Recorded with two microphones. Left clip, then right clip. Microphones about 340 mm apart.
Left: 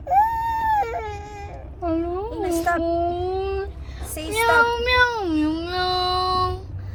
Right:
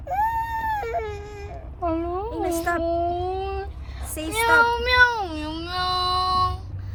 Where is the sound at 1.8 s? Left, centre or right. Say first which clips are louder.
Left 1 dB; right.